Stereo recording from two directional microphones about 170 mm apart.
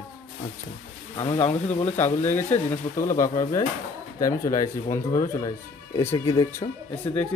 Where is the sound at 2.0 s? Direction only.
10° left (ahead or behind).